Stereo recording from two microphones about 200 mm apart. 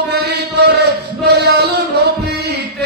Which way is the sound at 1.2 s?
55° right (ahead or behind).